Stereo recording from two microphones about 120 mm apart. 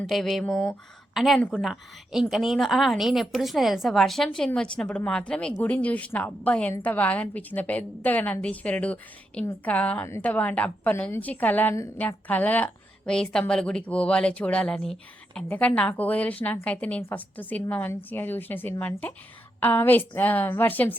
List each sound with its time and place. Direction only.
0.0 s a woman's voice: centre (ahead or behind)
1.4 s a woman's voice: 10° left (ahead or behind)
1.6 s a woman's voice: 5° right (ahead or behind); by 20.9 s 15° left (ahead or behind)